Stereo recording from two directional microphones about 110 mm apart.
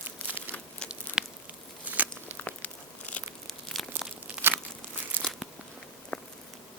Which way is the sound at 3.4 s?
Centre (ahead or behind).